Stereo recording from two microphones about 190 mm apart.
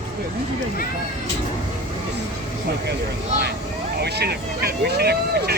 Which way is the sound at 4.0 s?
60° right (ahead or behind).